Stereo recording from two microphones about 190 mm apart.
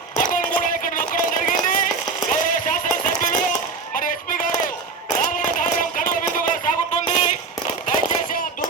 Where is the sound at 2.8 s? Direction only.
45° left (ahead or behind).